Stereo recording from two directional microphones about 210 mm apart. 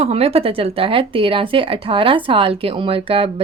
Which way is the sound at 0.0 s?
30° right (ahead or behind).